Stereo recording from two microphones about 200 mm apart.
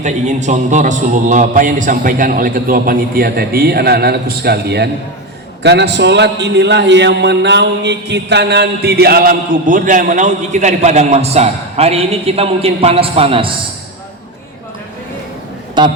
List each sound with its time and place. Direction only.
0.0 s a man's voice: 35° right (ahead or behind)
15.8 s a man's voice: 20° right (ahead or behind)